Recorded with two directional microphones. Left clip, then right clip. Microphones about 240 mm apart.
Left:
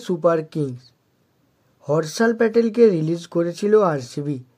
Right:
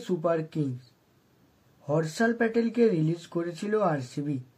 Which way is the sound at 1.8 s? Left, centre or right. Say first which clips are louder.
Left 7 dB; left.